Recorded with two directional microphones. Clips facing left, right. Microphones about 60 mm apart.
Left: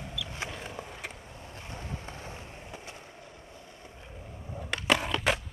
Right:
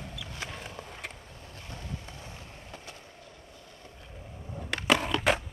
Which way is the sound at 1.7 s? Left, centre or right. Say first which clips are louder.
Left 1 dB; left.